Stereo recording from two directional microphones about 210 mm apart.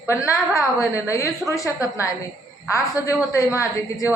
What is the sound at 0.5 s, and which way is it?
A woman's voice, 15° left (ahead or behind).